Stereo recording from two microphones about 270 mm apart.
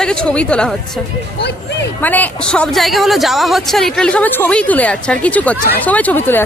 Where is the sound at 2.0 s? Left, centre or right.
Centre.